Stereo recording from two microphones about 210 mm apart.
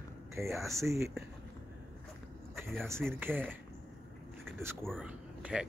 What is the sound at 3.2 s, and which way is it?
Speech, 10° right (ahead or behind).